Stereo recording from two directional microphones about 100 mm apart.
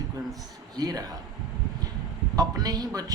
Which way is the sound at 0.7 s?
40° right (ahead or behind).